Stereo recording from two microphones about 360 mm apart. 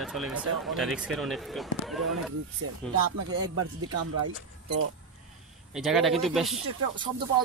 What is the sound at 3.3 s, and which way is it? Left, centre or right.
Speech, right.